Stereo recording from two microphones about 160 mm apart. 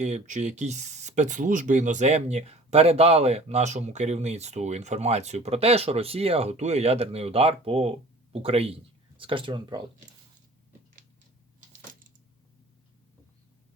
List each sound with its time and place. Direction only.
0.0 s speech: 45° right (ahead or behind); by 9.8 s 30° right (ahead or behind)